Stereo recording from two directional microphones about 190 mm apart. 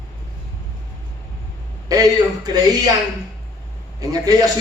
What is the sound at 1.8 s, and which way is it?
Speech, 20° right (ahead or behind).